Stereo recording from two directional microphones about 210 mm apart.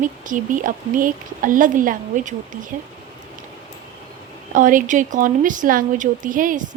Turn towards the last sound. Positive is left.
turn(degrees=-40)  # may be behind; listen again after turning